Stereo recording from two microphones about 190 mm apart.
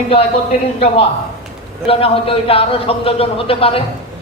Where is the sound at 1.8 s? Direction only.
30° left (ahead or behind).